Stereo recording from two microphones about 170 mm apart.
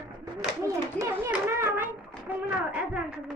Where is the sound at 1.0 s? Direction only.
15° right (ahead or behind).